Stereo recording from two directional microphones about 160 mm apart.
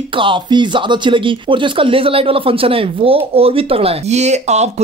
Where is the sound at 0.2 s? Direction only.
30° right (ahead or behind).